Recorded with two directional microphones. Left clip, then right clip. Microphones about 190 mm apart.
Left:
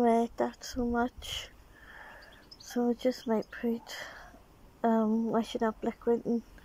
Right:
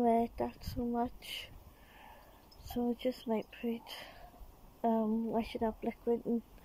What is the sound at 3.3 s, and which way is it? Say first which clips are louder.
Speech: left 5 dB; 45° left (ahead or behind).